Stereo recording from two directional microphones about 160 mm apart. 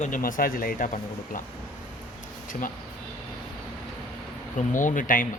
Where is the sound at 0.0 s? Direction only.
55° left (ahead or behind).